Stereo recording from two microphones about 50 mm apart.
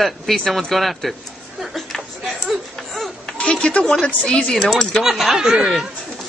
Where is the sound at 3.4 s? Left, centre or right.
Centre.